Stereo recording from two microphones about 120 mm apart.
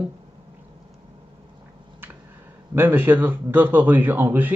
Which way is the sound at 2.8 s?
15° right (ahead or behind).